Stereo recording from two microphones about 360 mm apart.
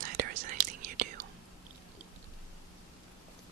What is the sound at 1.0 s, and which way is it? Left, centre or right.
Whispering, right.